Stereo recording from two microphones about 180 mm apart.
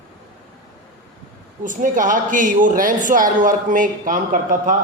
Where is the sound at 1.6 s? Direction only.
45° right (ahead or behind).